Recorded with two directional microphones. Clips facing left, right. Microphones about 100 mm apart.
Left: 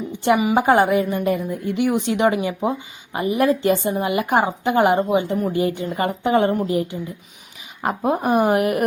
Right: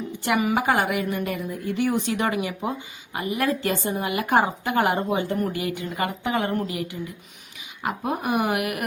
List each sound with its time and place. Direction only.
0.5 s a woman's voice: 25° left (ahead or behind)